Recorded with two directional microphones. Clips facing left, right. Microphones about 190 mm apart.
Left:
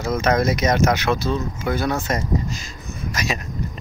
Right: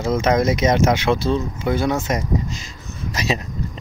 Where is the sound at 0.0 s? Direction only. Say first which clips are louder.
Right 2 dB; 25° right (ahead or behind).